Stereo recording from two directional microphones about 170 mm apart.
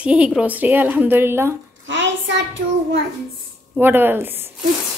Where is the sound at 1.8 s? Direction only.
90° right.